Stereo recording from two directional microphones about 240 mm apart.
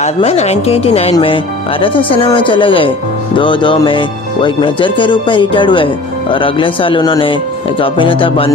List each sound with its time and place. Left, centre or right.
0.0 s speech: left